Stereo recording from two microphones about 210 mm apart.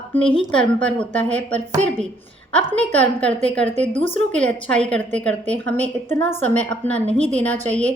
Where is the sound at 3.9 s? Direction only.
25° left (ahead or behind).